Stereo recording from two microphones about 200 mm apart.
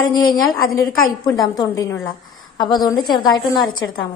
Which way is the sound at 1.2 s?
20° left (ahead or behind).